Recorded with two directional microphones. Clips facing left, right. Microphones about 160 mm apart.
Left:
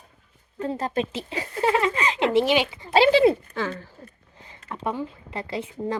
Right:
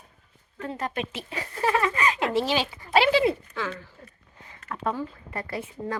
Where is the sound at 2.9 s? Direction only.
30° left (ahead or behind).